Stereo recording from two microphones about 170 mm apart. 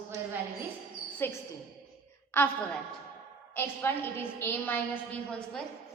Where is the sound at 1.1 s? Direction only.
10° left (ahead or behind).